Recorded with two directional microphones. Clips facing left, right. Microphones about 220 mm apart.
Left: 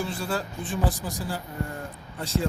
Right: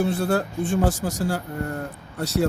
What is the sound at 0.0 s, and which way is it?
Speech, 65° right (ahead or behind).